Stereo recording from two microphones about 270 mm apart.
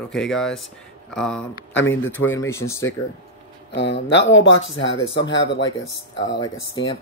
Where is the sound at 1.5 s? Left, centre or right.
Left.